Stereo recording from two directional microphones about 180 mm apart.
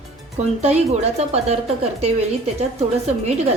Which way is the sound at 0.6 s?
35° right (ahead or behind).